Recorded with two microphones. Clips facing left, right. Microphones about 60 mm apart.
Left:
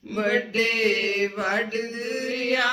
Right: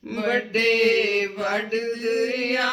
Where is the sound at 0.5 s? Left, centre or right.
Right.